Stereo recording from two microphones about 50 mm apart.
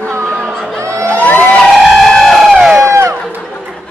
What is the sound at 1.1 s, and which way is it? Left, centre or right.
Vehicle, left.